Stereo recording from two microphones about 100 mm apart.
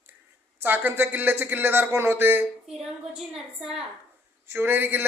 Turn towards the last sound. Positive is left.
turn(degrees=-20)  # may be behind; listen again after turning